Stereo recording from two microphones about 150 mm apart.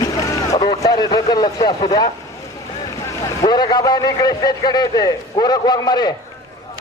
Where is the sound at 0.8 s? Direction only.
25° left (ahead or behind).